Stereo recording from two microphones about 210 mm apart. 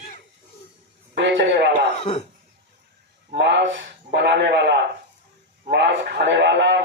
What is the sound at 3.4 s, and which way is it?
A man's voice, 55° right (ahead or behind).